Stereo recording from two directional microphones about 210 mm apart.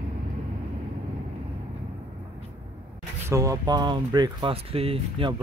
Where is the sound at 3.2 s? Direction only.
15° right (ahead or behind).